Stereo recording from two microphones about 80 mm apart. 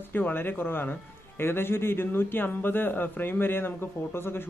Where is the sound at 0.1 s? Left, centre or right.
Left.